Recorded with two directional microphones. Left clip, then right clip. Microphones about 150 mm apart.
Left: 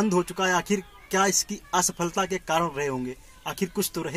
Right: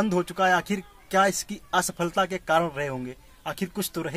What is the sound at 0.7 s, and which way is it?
Speech, 55° right (ahead or behind).